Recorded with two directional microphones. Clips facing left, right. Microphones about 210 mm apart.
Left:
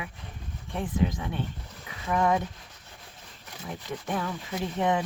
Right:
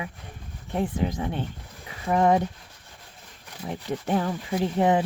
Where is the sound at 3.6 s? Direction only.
30° right (ahead or behind).